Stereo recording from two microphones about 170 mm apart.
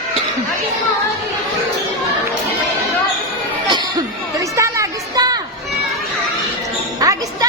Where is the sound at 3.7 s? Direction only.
20° right (ahead or behind).